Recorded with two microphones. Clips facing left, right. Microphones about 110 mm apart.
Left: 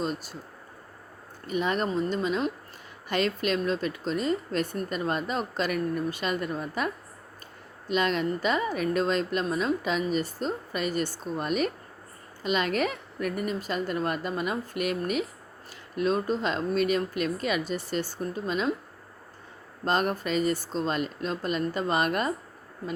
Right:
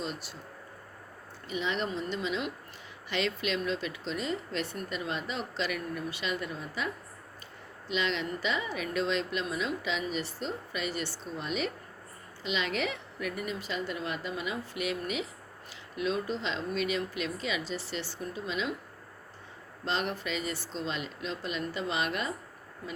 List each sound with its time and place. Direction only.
0.0 s speech: 45° left (ahead or behind)
1.5 s speech: 50° left (ahead or behind)
19.8 s speech: 45° left (ahead or behind)